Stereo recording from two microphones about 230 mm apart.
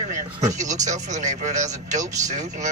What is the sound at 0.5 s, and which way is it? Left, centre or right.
Speech, right.